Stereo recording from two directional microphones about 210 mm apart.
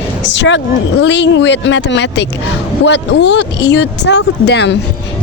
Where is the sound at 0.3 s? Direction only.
60° left (ahead or behind).